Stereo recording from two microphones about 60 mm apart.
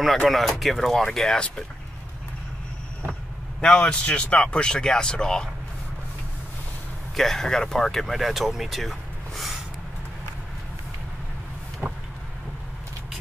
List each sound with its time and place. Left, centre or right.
0.0 s speech: centre
3.6 s speech: centre
7.2 s speech: centre
11.8 s vehicle: right